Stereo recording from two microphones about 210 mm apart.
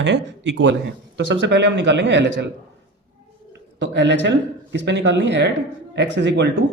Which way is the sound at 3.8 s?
55° right (ahead or behind).